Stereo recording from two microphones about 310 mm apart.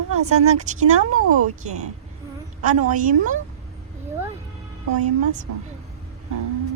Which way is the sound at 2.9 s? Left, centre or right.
Right.